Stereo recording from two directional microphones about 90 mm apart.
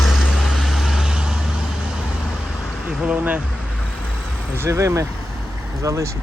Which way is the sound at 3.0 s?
15° right (ahead or behind).